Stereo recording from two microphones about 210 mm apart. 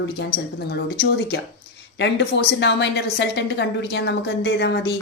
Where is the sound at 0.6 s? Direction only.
50° left (ahead or behind).